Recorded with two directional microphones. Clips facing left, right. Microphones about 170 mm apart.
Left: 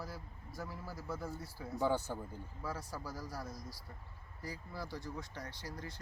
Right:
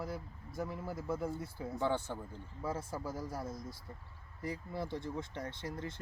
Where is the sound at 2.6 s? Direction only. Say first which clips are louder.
Right 5 dB; 25° right (ahead or behind).